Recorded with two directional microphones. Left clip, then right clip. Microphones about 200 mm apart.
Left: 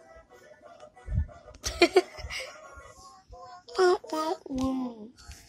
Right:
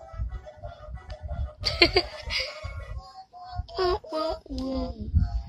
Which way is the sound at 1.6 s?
5° right (ahead or behind).